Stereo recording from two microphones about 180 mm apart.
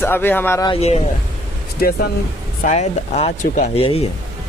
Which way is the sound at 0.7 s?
35° left (ahead or behind).